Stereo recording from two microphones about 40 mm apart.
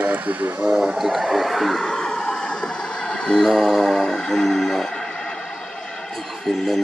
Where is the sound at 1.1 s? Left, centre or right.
Centre.